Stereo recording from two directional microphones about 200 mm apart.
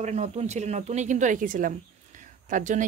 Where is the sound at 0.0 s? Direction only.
35° right (ahead or behind).